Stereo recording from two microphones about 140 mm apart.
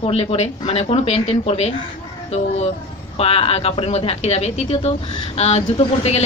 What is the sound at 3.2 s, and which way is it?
Speech, 45° left (ahead or behind).